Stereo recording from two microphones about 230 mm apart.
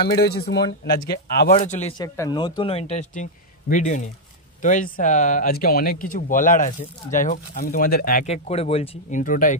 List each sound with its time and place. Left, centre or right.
0.0 s speech: left
1.5 s speech: left
2.0 s speech: centre; by 8.3 s left
8.3 s speech: left